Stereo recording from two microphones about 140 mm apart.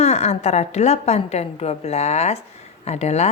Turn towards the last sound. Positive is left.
turn(degrees=55)  # may be behind; listen again after turning